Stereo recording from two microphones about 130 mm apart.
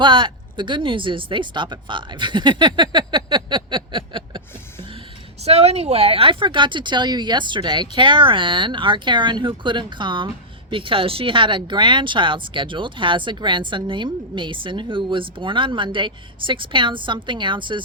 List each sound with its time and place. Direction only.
0.0 s speech: 40° right (ahead or behind)
5.4 s speech: 55° right (ahead or behind)